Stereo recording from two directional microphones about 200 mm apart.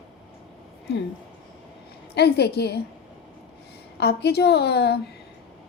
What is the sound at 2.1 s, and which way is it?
Speech, 55° left (ahead or behind).